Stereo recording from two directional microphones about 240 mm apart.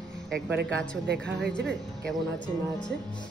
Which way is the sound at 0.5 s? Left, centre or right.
Right.